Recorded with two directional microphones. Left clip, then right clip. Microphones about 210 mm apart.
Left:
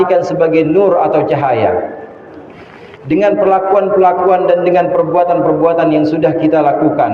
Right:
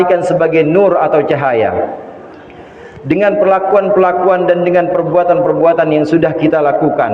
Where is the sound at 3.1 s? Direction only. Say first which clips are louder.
Even; 50° right (ahead or behind).